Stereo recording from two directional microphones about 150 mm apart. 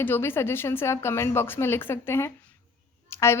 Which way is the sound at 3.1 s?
15° left (ahead or behind).